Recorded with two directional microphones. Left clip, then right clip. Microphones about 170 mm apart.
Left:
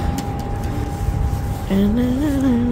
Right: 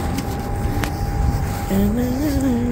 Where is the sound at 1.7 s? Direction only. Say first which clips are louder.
Left 2 dB; 25° left (ahead or behind).